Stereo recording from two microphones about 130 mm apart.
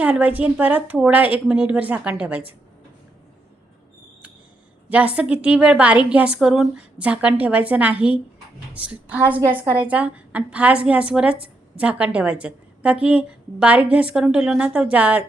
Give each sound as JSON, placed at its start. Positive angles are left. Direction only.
{"t": 0.0, "sound": "a woman's voice", "side_deg": -10}
{"t": 4.9, "sound": "a woman's voice", "side_deg": -10}